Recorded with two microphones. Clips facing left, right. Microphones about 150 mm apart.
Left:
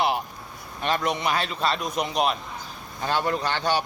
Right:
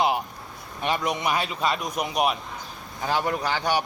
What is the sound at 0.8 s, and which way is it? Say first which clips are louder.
A man's voice: left 1 dB; 10° right (ahead or behind).